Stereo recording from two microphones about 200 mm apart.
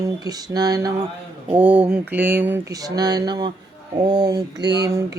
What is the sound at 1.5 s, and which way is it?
Mantra, 5° right (ahead or behind).